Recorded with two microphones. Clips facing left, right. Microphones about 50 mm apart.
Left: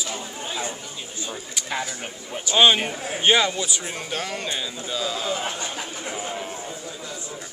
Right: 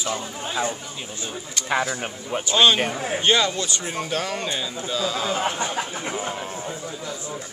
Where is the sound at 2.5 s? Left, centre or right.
Centre.